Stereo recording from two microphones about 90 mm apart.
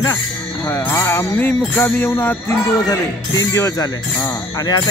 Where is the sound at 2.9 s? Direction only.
35° left (ahead or behind).